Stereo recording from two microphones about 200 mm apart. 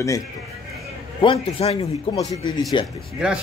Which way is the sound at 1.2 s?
25° left (ahead or behind).